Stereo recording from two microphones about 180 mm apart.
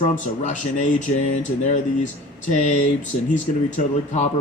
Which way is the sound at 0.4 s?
40° left (ahead or behind).